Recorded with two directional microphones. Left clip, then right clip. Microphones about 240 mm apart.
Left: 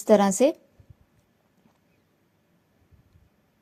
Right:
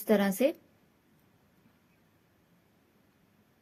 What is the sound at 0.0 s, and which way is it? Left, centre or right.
Speech, left.